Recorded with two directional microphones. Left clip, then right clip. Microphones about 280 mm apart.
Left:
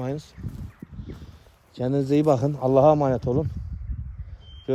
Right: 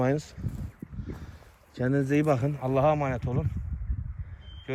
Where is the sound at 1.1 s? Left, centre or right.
Centre.